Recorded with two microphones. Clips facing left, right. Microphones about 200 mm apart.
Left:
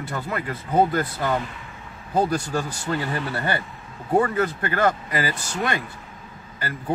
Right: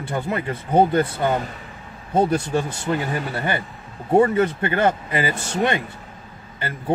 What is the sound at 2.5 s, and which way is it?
Speech, 20° right (ahead or behind).